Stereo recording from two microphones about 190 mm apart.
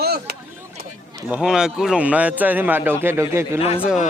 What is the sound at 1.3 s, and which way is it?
Speech, 5° right (ahead or behind).